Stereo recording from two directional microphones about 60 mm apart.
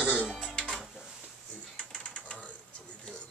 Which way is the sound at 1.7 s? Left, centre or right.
Centre.